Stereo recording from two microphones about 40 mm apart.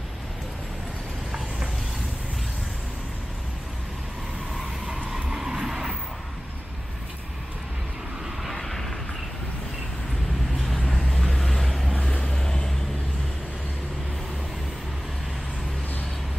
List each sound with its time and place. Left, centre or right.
4.8 s vehicle: centre
8.5 s vehicle: centre
10.5 s vehicle: centre
12.2 s vehicle: centre